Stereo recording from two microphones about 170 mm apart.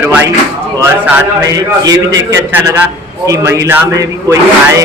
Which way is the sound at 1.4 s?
20° right (ahead or behind).